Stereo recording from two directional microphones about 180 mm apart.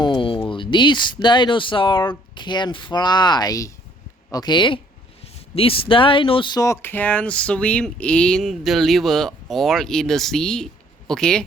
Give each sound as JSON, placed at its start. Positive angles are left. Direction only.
{"t": 0.0, "sound": "speech", "side_deg": 25}